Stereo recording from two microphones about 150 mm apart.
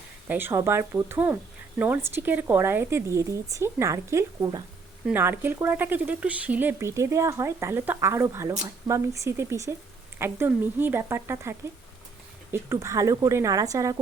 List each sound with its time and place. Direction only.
0.3 s a woman's voice: 15° right (ahead or behind)